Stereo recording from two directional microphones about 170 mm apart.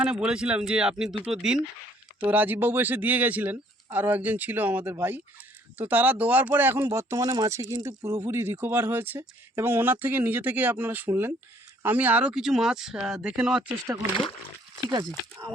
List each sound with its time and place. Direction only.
0.0 s speech: 5° right (ahead or behind)
13.6 s speech: 15° right (ahead or behind)